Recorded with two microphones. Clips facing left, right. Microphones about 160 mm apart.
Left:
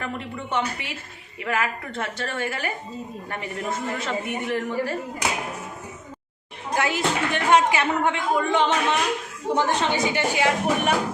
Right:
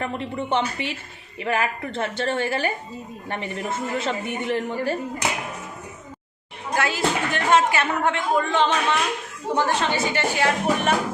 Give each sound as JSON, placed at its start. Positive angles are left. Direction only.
{"t": 0.0, "sound": "a woman's voice", "side_deg": -30}
{"t": 6.7, "sound": "speech", "side_deg": 20}